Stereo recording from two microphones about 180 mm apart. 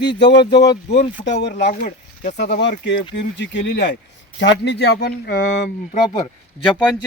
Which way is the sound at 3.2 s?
85° left.